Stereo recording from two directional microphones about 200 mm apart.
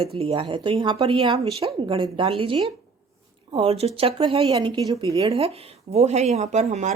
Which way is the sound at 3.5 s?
30° right (ahead or behind).